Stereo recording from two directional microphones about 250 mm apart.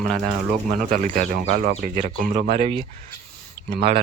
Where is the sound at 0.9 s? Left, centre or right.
Right.